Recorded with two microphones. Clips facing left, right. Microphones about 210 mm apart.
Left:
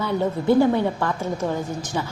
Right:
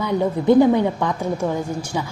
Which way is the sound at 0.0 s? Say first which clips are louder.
Right 3 dB; 15° right (ahead or behind).